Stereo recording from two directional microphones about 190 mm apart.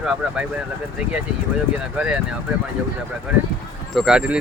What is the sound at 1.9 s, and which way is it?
Speech, 5° right (ahead or behind).